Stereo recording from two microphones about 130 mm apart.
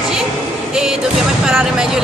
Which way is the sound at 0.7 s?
5° right (ahead or behind).